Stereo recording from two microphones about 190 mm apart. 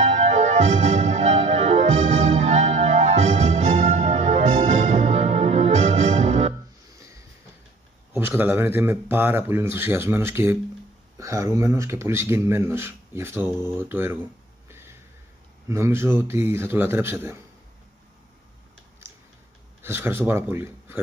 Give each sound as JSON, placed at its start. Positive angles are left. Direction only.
{"t": 0.0, "sound": "music", "side_deg": -35}
{"t": 8.1, "sound": "speech", "side_deg": -10}
{"t": 14.7, "sound": "a sound", "side_deg": -15}
{"t": 15.7, "sound": "speech", "side_deg": -15}
{"t": 19.0, "sound": "tick-tock", "side_deg": -15}
{"t": 19.8, "sound": "speech", "side_deg": -10}